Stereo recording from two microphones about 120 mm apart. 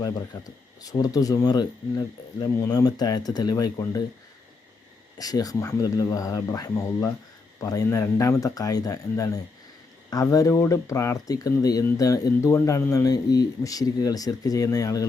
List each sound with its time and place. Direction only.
0.0 s speech: 30° left (ahead or behind)
5.1 s speech: 30° left (ahead or behind)